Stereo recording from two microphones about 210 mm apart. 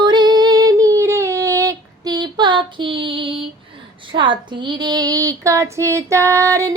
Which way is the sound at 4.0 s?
25° right (ahead or behind).